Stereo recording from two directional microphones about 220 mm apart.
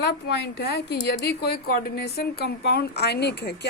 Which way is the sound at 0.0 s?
50° left (ahead or behind).